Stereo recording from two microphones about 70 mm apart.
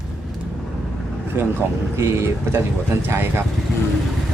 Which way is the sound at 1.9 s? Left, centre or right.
Right.